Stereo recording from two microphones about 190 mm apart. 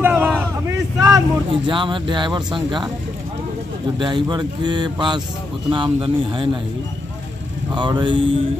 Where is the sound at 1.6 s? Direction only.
25° right (ahead or behind).